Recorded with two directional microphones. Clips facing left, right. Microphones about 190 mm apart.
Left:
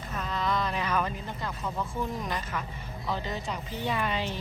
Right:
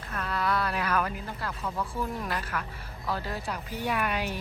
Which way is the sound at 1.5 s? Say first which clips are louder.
Even; 10° left (ahead or behind).